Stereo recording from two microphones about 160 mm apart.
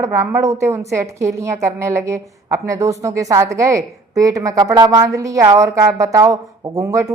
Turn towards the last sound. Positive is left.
turn(degrees=-20)  # may be behind; listen again after turning